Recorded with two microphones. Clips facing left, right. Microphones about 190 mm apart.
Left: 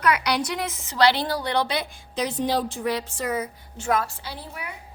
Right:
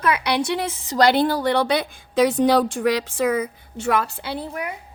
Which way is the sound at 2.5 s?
75° right (ahead or behind).